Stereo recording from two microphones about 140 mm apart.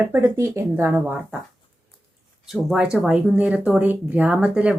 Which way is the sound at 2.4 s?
Centre (ahead or behind).